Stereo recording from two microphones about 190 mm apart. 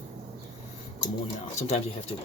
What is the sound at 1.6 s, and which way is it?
Speech, 35° left (ahead or behind).